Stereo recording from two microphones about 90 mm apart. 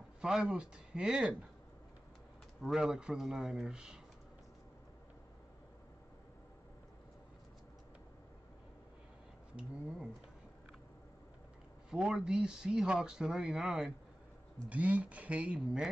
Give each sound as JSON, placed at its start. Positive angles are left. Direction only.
{"t": 0.2, "sound": "speech", "side_deg": -5}
{"t": 2.6, "sound": "speech", "side_deg": -5}
{"t": 9.6, "sound": "speech", "side_deg": -5}
{"t": 11.9, "sound": "speech", "side_deg": -10}